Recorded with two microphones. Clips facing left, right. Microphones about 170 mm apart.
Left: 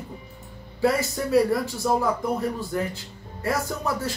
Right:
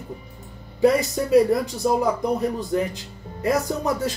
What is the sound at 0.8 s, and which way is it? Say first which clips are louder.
Speech: right 4 dB; 20° right (ahead or behind).